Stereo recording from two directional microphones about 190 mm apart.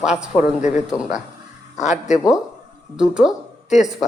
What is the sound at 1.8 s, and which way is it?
Speech, 35° left (ahead or behind).